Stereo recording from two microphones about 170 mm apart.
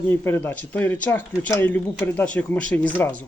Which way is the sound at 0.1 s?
15° left (ahead or behind).